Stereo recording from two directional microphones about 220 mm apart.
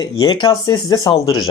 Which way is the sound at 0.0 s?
20° left (ahead or behind).